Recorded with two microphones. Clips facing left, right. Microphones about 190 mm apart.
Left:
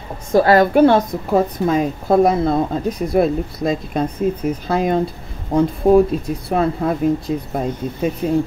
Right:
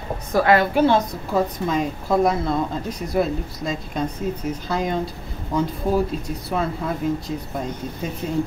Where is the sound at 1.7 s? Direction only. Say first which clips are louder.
Left 5 dB; 55° left (ahead or behind).